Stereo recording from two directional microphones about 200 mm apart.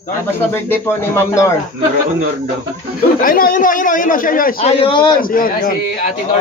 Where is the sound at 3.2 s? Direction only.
45° left (ahead or behind).